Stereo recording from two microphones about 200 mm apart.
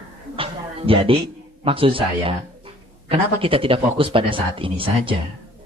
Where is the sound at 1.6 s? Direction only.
25° right (ahead or behind).